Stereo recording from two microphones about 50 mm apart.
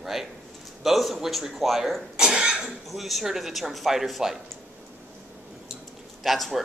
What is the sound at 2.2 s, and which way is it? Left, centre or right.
Speech, centre.